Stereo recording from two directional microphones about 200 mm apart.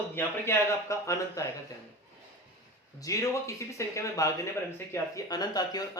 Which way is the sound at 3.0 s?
15° left (ahead or behind).